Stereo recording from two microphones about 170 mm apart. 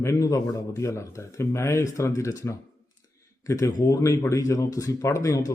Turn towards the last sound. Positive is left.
turn(degrees=20)  # may be behind; listen again after turning